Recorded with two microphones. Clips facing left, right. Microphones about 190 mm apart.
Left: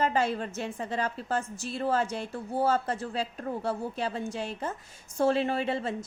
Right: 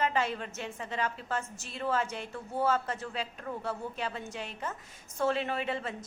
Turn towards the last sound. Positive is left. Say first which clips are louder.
# left 4 dB
turn(degrees=30)  # may be behind; listen again after turning